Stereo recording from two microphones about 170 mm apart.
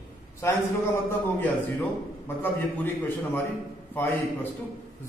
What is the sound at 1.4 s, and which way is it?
Speech, 10° left (ahead or behind).